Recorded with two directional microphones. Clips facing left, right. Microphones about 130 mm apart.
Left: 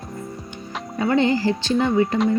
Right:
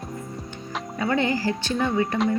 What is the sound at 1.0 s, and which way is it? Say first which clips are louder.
Speech: left 5 dB; 25° left (ahead or behind).